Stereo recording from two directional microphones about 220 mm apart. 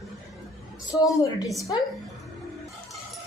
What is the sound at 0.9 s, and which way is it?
Speech, 15° left (ahead or behind).